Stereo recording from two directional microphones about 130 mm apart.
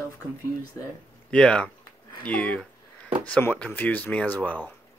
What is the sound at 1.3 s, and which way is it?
Speech, 10° left (ahead or behind).